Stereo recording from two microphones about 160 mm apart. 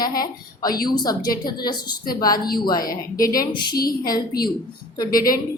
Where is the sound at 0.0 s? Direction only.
25° left (ahead or behind).